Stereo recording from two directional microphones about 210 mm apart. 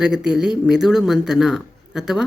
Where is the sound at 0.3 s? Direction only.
5° right (ahead or behind).